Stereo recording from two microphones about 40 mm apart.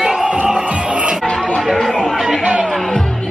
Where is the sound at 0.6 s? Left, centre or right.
Right.